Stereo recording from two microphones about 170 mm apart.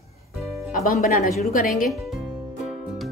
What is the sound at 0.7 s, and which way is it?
A woman's voice, 50° left (ahead or behind).